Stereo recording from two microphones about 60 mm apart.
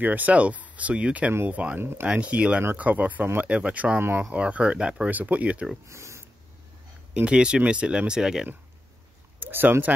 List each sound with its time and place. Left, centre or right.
0.0 s speech: right
1.8 s speech: right
2.0 s speech: right
4.0 s speech: right
4.3 s speech: right
5.9 s speech: right
7.2 s speech: centre
9.4 s speech: right